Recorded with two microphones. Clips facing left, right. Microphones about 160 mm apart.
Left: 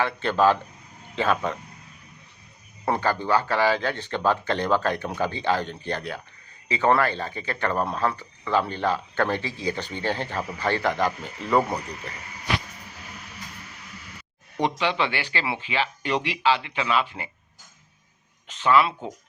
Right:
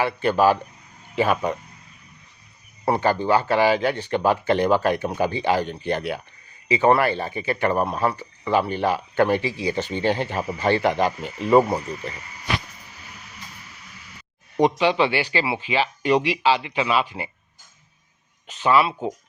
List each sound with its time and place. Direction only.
0.0 s a man's voice: 10° right (ahead or behind)
2.8 s a man's voice: 15° right (ahead or behind)
14.6 s a man's voice: 15° right (ahead or behind)
18.4 s a man's voice: 15° right (ahead or behind)